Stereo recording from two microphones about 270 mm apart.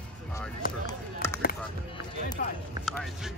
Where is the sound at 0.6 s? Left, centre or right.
Left.